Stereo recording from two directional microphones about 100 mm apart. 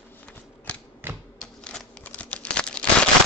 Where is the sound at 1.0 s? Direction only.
20° right (ahead or behind).